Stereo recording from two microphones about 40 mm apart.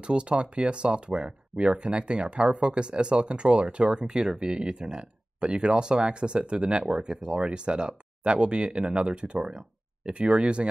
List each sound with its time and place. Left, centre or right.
0.0 s speech: right